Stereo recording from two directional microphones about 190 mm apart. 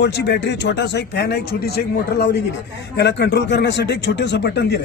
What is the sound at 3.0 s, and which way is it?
Speech, 65° left (ahead or behind).